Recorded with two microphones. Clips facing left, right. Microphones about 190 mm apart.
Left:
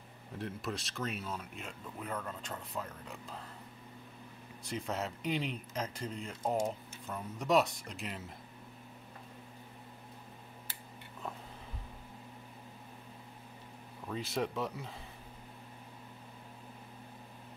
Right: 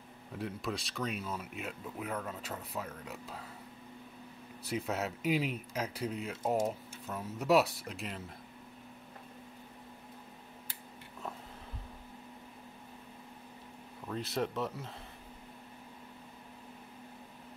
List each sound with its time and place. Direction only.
0.4 s speech: centre (ahead or behind)
4.6 s speech: 5° right (ahead or behind)
14.0 s speech: centre (ahead or behind)